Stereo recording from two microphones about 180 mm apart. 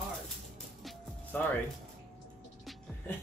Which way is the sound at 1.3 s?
10° left (ahead or behind).